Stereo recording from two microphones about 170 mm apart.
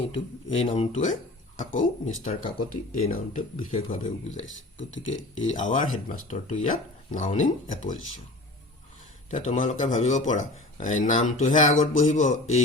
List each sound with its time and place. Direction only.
0.1 s a man's voice: 35° left (ahead or behind)
4.9 s speech: 90° left
5.5 s a man's voice: 50° left (ahead or behind)
9.3 s a man's voice: 50° left (ahead or behind)